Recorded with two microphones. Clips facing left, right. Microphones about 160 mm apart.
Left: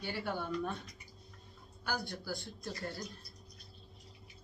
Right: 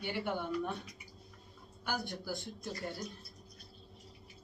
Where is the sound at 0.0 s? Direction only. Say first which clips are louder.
Right 2 dB; 20° right (ahead or behind).